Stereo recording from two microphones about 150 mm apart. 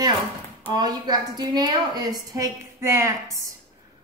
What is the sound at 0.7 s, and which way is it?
A woman's voice, 30° right (ahead or behind).